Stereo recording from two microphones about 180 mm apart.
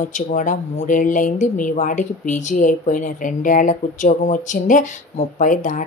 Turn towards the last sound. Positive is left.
turn(degrees=45)  # may be behind; listen again after turning